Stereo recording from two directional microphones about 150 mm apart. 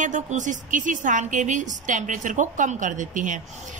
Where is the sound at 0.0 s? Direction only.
55° right (ahead or behind).